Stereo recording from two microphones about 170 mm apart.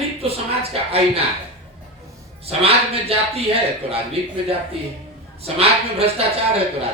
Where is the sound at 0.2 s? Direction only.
35° right (ahead or behind).